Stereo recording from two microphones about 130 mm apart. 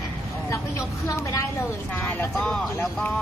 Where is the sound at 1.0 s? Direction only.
25° left (ahead or behind).